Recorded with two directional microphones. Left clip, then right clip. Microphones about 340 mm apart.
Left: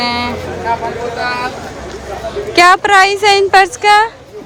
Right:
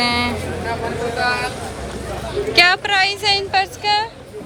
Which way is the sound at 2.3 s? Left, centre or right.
Centre.